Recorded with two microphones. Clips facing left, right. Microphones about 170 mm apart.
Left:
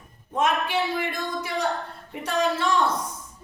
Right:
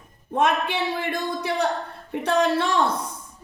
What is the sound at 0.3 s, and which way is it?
Speech, 60° right (ahead or behind).